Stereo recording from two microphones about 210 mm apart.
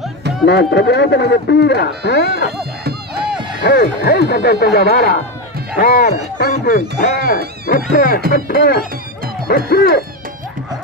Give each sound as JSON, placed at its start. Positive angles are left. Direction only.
{"t": 0.5, "sound": "speech", "side_deg": 55}
{"t": 3.6, "sound": "speech", "side_deg": 50}